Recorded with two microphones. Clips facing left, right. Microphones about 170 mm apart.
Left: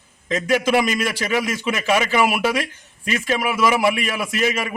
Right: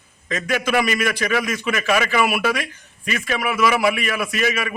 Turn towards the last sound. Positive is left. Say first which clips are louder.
# even
turn(degrees=20)  # may be behind; listen again after turning